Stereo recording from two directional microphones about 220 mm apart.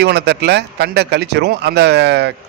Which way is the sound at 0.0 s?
50° right (ahead or behind).